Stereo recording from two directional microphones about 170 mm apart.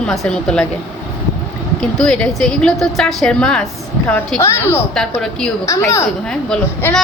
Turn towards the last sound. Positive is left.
turn(degrees=5)  # may be behind; listen again after turning